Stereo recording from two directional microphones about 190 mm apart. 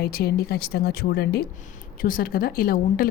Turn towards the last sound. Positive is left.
turn(degrees=50)  # may be behind; listen again after turning